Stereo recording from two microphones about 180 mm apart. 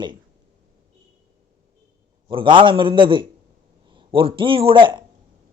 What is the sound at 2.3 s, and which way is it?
A man's voice, 25° right (ahead or behind).